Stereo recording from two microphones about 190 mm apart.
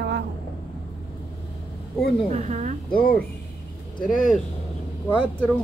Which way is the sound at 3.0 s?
50° left (ahead or behind).